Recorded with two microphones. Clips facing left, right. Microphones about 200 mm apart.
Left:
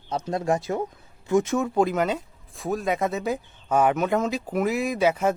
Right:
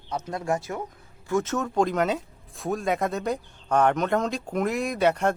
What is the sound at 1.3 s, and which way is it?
Speech, 15° left (ahead or behind).